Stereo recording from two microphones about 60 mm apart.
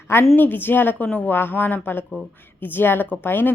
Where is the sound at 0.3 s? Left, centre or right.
Left.